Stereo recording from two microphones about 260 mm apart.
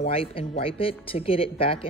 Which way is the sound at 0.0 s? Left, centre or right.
Left.